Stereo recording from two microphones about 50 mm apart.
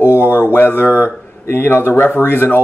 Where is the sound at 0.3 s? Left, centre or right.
Left.